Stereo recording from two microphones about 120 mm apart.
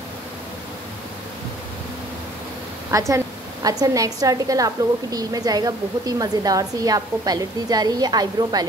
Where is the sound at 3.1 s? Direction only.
30° right (ahead or behind).